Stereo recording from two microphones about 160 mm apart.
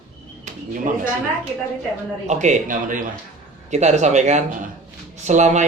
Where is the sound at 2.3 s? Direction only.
50° right (ahead or behind).